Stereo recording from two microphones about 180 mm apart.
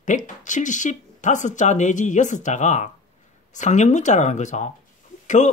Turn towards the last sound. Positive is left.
turn(degrees=40)  # may be behind; listen again after turning